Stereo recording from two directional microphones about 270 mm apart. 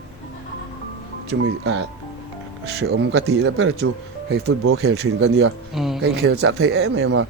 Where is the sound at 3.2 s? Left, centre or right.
Right.